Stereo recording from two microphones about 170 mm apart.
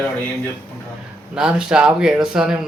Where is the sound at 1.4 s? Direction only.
5° right (ahead or behind).